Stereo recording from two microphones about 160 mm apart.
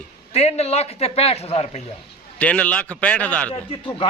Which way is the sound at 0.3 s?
40° left (ahead or behind).